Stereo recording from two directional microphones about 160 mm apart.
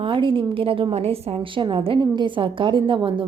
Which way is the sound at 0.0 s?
30° right (ahead or behind).